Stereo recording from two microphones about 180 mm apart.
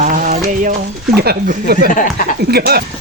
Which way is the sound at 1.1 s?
60° right (ahead or behind).